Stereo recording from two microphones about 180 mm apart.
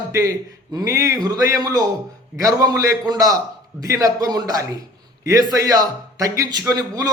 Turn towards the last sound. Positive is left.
turn(degrees=-20)  # may be behind; listen again after turning